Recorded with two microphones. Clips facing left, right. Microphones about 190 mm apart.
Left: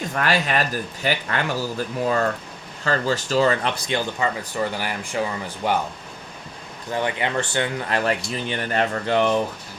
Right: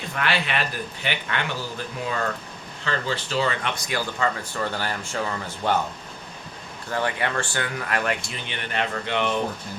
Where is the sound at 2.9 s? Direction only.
40° left (ahead or behind).